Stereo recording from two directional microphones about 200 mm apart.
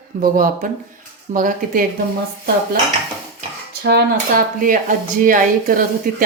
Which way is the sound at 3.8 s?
55° right (ahead or behind).